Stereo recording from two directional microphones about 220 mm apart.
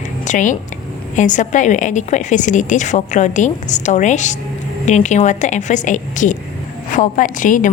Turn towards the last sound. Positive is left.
turn(degrees=35)  # may be behind; listen again after turning